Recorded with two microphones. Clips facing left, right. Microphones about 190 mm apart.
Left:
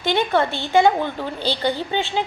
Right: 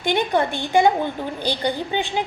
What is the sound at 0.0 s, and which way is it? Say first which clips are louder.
A woman's voice: left 1 dB; 15° right (ahead or behind).